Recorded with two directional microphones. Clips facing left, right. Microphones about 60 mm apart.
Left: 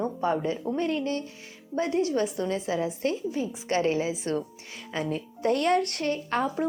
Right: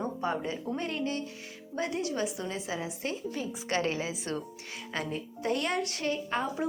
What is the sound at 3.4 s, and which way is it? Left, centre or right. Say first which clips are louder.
A woman's voice: left 4 dB; left.